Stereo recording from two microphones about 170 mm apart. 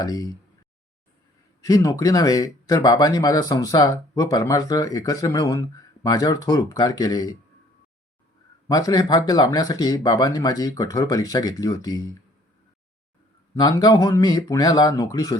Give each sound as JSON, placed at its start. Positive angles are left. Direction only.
{"t": 0.0, "sound": "speech", "side_deg": 20}
{"t": 1.6, "sound": "speech", "side_deg": 20}
{"t": 8.6, "sound": "speech", "side_deg": 20}
{"t": 13.6, "sound": "speech", "side_deg": 20}